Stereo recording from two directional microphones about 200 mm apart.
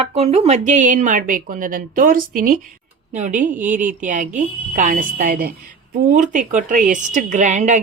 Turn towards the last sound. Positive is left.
turn(degrees=-35)  # may be behind; listen again after turning